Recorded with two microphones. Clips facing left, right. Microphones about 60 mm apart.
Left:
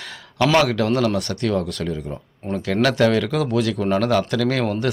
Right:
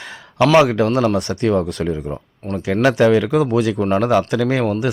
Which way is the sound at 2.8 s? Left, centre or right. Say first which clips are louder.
Right 4 dB; centre.